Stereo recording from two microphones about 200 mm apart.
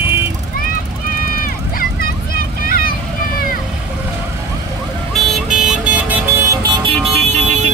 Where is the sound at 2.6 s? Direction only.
45° left (ahead or behind).